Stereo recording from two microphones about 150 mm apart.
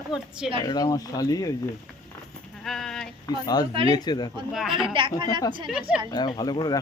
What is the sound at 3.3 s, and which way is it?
Speech, 25° left (ahead or behind).